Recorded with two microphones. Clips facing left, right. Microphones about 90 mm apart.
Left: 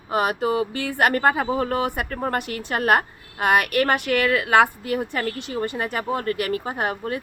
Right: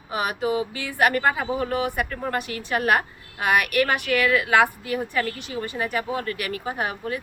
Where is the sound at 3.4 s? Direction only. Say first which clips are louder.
Left 2 dB; 35° left (ahead or behind).